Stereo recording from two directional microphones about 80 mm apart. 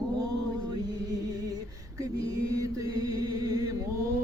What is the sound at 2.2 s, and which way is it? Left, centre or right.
Mantra, right.